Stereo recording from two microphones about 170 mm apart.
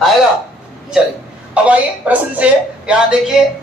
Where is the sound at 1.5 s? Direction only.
10° right (ahead or behind).